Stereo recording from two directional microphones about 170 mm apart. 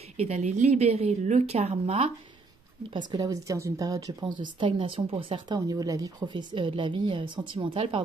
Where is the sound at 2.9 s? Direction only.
25° right (ahead or behind).